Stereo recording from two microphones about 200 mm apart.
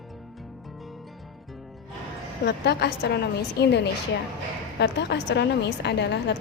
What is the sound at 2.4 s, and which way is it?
A woman's voice, 55° left (ahead or behind).